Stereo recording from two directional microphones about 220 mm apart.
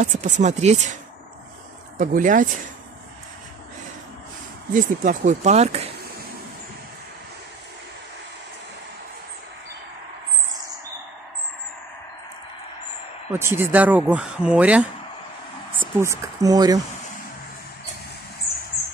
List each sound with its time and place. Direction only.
0.0 s speech: 35° right (ahead or behind)
2.0 s speech: 35° right (ahead or behind)
4.7 s speech: 35° right (ahead or behind)
13.3 s speech: 10° right (ahead or behind)
16.0 s speech: 15° right (ahead or behind)